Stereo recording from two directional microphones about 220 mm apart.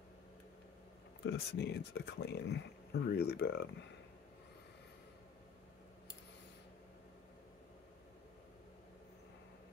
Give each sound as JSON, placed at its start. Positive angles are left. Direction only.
{"t": 1.2, "sound": "speech", "side_deg": 50}